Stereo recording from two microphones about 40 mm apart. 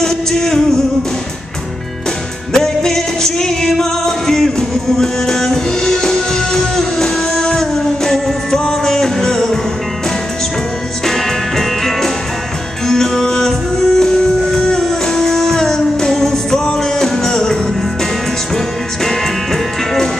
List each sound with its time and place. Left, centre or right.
0.0 s music: centre
2.5 s music: centre
11.1 s music: centre
19.0 s music: centre